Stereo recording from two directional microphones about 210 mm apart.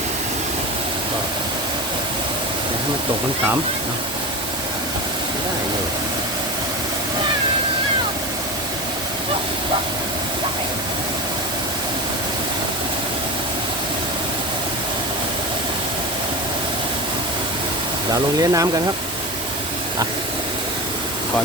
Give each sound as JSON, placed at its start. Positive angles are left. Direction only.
{"t": 18.1, "sound": "speech", "side_deg": -15}